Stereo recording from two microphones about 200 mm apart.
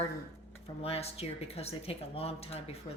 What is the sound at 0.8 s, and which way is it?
Speech, 30° left (ahead or behind).